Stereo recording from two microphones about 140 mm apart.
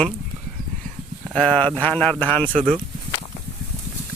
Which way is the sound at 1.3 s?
5° left (ahead or behind).